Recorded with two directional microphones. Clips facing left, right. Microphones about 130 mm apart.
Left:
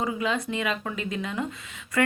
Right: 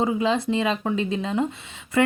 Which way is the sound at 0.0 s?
30° right (ahead or behind).